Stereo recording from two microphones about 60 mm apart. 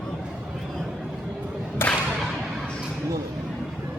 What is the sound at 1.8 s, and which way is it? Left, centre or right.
Whip, left.